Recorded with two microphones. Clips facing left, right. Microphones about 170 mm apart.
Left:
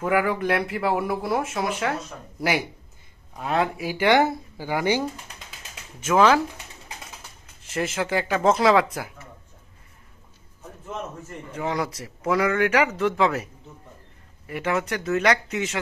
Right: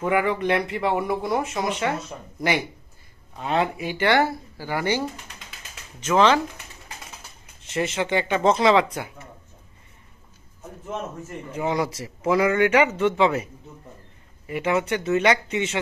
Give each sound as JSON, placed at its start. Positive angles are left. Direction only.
{"t": 0.0, "sound": "speech", "side_deg": 0}
{"t": 3.3, "sound": "speech", "side_deg": 0}
{"t": 7.6, "sound": "speech", "side_deg": 0}
{"t": 11.5, "sound": "speech", "side_deg": -5}